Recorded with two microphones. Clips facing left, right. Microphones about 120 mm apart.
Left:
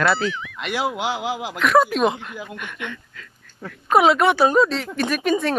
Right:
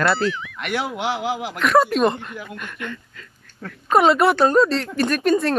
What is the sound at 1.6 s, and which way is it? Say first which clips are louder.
Speech: even; centre (ahead or behind).